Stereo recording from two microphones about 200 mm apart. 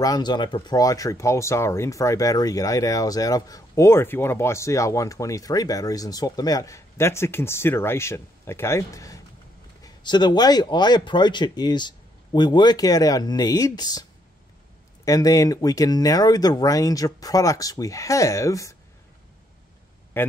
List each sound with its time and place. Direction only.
0.0 s a man's voice: 20° left (ahead or behind)
15.0 s speech: 15° left (ahead or behind)
20.2 s a man's voice: 10° left (ahead or behind)